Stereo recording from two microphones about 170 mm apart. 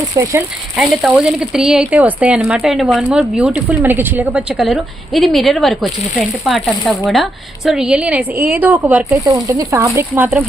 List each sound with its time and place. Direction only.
0.1 s speech: 25° right (ahead or behind)
0.8 s a woman's voice: 5° right (ahead or behind)
9.2 s a woman's voice: 20° right (ahead or behind)